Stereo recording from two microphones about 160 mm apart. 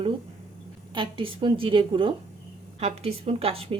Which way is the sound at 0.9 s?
30° right (ahead or behind).